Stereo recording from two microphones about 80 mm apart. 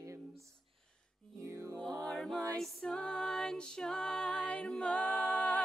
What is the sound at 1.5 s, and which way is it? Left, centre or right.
Music, right.